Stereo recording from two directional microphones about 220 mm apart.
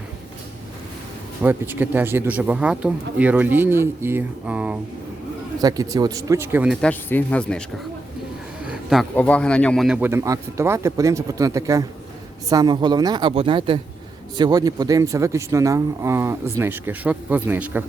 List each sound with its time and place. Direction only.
1.4 s speech: 10° right (ahead or behind)
5.5 s speech: 15° right (ahead or behind)
6.8 s speech: 5° left (ahead or behind)
8.6 s speech: 5° right (ahead or behind)